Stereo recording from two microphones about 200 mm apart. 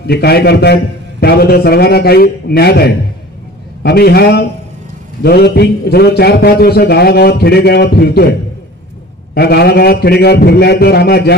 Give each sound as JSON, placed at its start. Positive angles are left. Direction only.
{"t": 0.0, "sound": "a man's voice", "side_deg": 55}